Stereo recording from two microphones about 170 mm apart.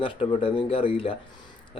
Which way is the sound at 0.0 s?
30° left (ahead or behind).